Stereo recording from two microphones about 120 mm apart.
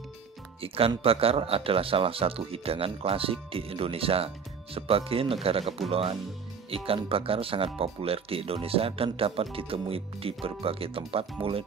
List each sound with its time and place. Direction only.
0.6 s speech: 55° right (ahead or behind)